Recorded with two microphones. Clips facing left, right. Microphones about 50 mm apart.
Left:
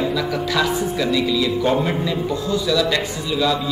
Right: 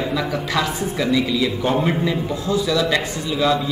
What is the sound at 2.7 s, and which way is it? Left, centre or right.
Speech, right.